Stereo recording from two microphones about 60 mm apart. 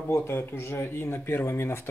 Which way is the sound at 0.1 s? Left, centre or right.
Left.